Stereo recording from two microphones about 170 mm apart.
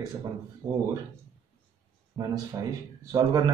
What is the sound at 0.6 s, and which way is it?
Speech, 10° right (ahead or behind).